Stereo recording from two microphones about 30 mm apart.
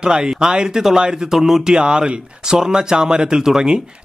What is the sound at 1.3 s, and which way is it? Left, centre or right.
Speech, centre.